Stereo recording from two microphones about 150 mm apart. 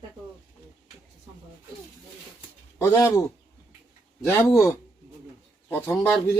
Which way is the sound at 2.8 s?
25° left (ahead or behind).